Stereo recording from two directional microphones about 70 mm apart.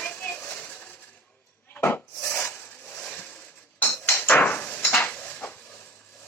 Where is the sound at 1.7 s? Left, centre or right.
Left.